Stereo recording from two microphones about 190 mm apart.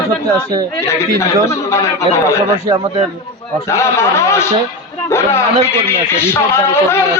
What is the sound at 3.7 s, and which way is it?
A man's voice, 15° left (ahead or behind).